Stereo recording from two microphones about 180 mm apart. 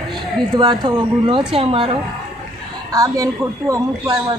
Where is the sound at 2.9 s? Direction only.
20° right (ahead or behind).